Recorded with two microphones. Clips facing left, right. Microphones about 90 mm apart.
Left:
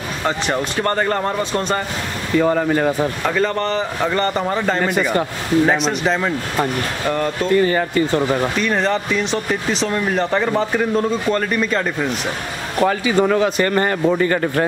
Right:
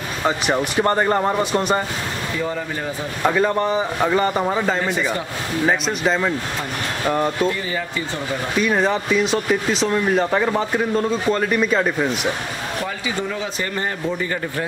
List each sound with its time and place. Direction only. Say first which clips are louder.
0.2 s speech: right 1 dB; 10° right (ahead or behind)
2.3 s a man's voice: left 12 dB; 60° left (ahead or behind)
3.3 s speech: right 4 dB; 10° right (ahead or behind)
7.1 s speech: right 1 dB; 10° right (ahead or behind)
7.5 s a man's voice: left 10 dB; 55° left (ahead or behind)
8.5 s speech: even; 5° right (ahead or behind)
12.8 s a man's voice: left 13 dB; 60° left (ahead or behind)